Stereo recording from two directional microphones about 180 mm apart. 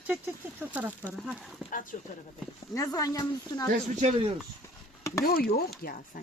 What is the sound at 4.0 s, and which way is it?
Speech, 40° right (ahead or behind).